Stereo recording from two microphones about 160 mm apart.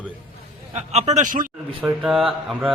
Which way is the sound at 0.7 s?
45° right (ahead or behind).